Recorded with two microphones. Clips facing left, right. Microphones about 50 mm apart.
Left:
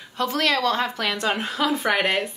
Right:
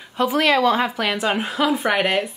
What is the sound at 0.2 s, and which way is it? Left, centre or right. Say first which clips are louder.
A woman's voice: right 5 dB; centre.